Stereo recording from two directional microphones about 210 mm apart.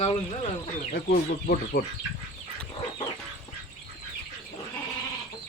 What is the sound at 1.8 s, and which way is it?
Speech, 45° left (ahead or behind).